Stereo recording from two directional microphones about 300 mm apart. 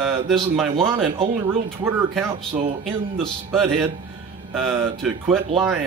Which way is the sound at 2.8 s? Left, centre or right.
Centre.